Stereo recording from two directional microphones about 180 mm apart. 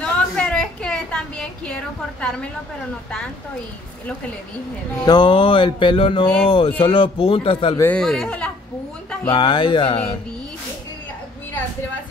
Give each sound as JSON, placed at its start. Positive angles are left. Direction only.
{"t": 0.0, "sound": "a sound", "side_deg": 5}
{"t": 5.0, "sound": "speech", "side_deg": 25}
{"t": 7.8, "sound": "speech", "side_deg": 5}
{"t": 9.3, "sound": "speech", "side_deg": 25}